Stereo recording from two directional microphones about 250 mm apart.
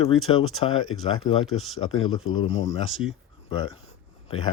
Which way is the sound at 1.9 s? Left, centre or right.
Left.